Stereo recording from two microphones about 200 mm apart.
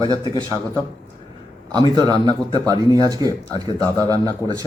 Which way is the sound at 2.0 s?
20° right (ahead or behind).